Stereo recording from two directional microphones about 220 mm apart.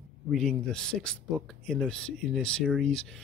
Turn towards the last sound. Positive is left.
turn(degrees=0)  # may be behind; listen again after turning